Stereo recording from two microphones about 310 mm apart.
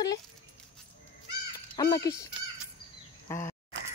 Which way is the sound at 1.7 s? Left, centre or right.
Centre.